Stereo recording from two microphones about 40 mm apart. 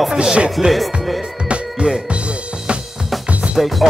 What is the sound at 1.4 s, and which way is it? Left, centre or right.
Music, right.